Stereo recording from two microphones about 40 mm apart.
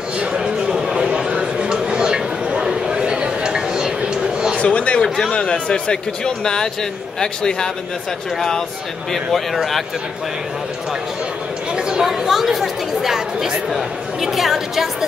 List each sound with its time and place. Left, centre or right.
0.3 s a sound: centre
1.6 s chatter: right
4.1 s a sound: centre
4.6 s speech: left
5.0 s speech: centre
5.3 s speech: left
9.1 s speech: centre
11.7 s speech: centre